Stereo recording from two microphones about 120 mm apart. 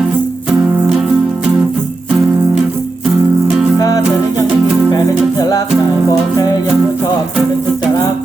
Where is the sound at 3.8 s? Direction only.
30° left (ahead or behind).